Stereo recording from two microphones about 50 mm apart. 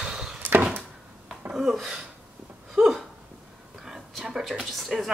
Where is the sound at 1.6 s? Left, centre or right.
Centre.